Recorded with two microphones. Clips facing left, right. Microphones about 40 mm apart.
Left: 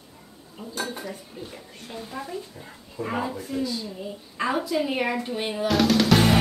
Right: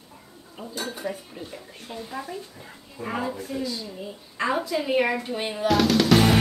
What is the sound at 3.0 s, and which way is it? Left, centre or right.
Speech, centre.